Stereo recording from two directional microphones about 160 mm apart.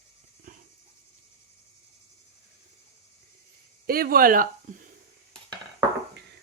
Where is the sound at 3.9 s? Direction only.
70° right (ahead or behind).